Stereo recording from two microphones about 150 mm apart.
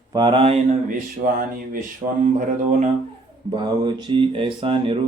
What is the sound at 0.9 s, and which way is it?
Speech, 70° right (ahead or behind).